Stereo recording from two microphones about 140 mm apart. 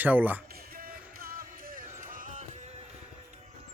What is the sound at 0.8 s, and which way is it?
Music, 90° right.